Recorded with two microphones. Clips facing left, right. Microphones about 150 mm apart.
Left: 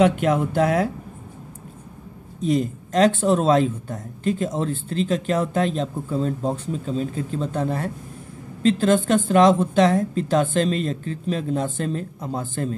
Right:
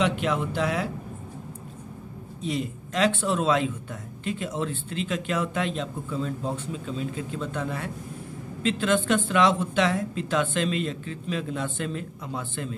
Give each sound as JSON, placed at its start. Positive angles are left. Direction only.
{"t": 0.0, "sound": "speech", "side_deg": 50}
{"t": 2.4, "sound": "speech", "side_deg": 40}